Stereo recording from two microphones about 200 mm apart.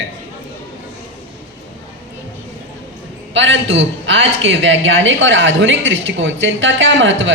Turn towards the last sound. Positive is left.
turn(degrees=-70)  # may be behind; listen again after turning